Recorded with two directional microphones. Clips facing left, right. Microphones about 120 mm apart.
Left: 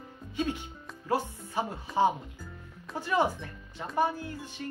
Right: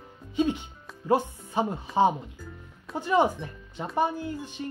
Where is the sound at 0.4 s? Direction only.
20° right (ahead or behind).